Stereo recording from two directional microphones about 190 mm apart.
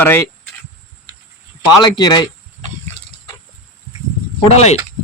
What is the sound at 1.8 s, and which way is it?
Speech, 20° left (ahead or behind).